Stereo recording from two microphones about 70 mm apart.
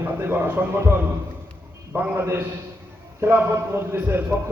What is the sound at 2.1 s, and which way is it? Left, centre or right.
A man's voice, right.